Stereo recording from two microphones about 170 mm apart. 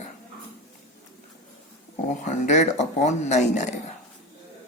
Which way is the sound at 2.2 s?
45° left (ahead or behind).